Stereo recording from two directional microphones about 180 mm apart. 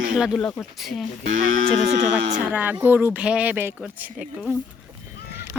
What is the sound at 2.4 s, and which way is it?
Speech, 10° right (ahead or behind).